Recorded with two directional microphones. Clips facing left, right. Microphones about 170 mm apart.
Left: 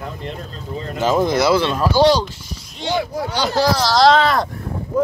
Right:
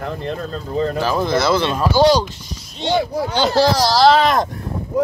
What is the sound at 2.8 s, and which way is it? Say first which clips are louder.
Speech: right 3 dB; 25° right (ahead or behind).